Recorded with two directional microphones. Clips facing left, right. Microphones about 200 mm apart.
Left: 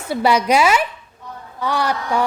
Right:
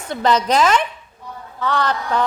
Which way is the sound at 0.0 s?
10° left (ahead or behind).